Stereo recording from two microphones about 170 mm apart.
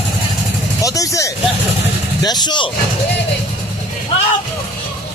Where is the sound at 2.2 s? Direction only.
25° left (ahead or behind).